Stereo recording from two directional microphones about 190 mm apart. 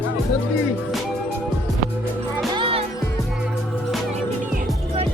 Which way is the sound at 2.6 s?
30° right (ahead or behind).